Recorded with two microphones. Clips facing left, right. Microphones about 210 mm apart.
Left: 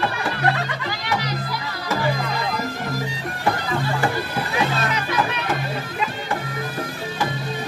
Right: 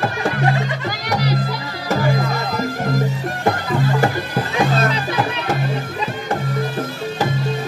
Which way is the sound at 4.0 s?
45° right (ahead or behind).